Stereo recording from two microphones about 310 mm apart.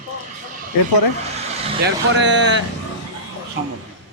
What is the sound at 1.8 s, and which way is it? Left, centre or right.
Speech, right.